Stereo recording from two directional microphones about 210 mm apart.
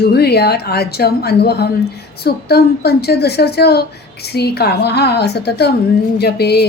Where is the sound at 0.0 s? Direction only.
50° left (ahead or behind).